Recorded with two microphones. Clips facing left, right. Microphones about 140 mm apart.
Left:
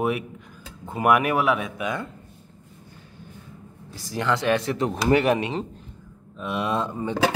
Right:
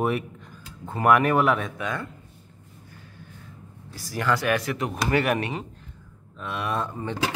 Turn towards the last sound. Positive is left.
turn(degrees=20)  # may be behind; listen again after turning